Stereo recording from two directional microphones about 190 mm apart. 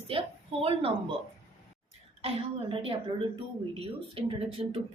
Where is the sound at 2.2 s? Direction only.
30° right (ahead or behind).